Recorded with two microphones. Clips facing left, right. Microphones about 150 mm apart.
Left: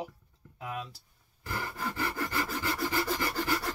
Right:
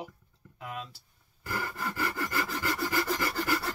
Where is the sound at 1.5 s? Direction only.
15° left (ahead or behind).